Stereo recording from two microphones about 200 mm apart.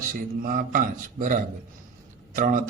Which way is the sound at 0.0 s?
45° right (ahead or behind).